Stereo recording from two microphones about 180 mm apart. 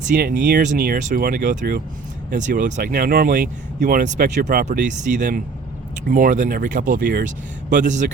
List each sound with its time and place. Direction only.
0.2 s speech: 60° right (ahead or behind)